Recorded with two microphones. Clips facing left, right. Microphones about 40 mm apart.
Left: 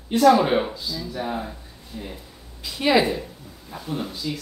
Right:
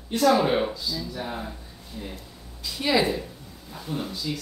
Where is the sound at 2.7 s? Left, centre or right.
Centre.